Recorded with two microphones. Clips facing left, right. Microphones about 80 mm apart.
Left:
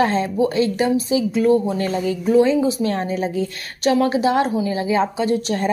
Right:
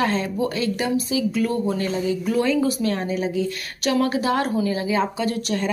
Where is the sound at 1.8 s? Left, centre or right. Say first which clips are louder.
Left 2 dB; left.